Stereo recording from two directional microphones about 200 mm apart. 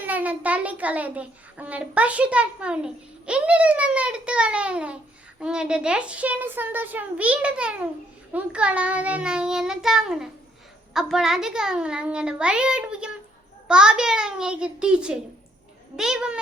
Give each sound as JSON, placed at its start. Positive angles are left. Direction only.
{"t": 0.0, "sound": "a child's voice", "side_deg": -10}